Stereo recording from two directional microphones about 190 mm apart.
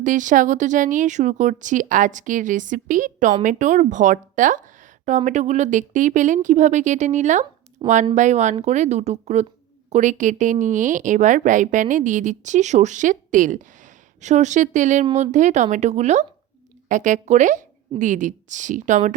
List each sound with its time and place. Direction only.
0.0 s speech: 40° right (ahead or behind)
7.8 s speech: 25° right (ahead or behind)
8.1 s speech: 40° right (ahead or behind)